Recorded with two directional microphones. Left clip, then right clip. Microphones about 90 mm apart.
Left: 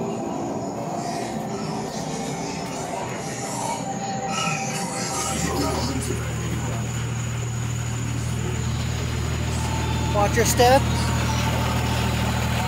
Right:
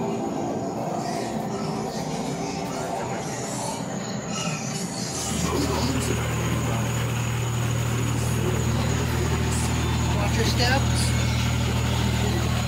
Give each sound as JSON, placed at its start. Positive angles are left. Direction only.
{"t": 10.4, "sound": "speech", "side_deg": 40}